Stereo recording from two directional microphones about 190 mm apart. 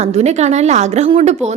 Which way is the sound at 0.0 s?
35° right (ahead or behind).